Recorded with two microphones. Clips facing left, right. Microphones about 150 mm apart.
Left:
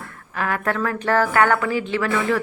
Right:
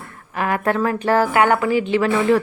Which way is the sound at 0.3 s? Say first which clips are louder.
Right 4 dB; 20° right (ahead or behind).